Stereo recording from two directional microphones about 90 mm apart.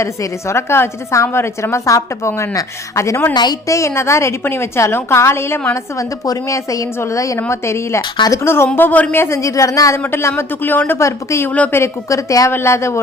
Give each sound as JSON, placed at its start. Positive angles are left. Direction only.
{"t": 0.0, "sound": "a woman's voice", "side_deg": 35}
{"t": 3.3, "sound": "a woman's voice", "side_deg": 50}
{"t": 3.7, "sound": "a woman's voice", "side_deg": 35}
{"t": 5.7, "sound": "a woman's voice", "side_deg": 40}
{"t": 10.0, "sound": "speech", "side_deg": 30}
{"t": 11.4, "sound": "a woman's voice", "side_deg": 15}
{"t": 11.7, "sound": "a woman's voice", "side_deg": 35}
{"t": 12.5, "sound": "a woman's voice", "side_deg": 30}